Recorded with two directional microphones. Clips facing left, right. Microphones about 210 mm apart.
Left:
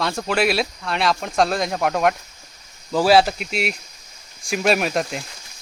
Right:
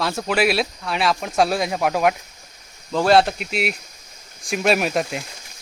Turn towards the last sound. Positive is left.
turn(degrees=0)  # may be behind; listen again after turning